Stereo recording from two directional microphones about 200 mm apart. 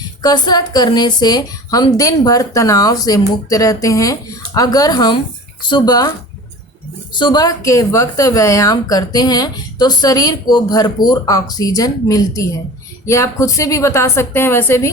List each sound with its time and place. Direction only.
0.2 s a woman's voice: 20° left (ahead or behind)
7.1 s a woman's voice: 20° left (ahead or behind)